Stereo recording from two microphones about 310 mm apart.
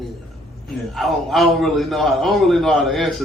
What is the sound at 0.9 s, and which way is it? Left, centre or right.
A man's voice, centre.